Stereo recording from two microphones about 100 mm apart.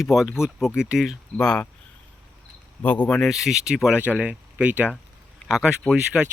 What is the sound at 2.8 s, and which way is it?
Speech, 15° left (ahead or behind).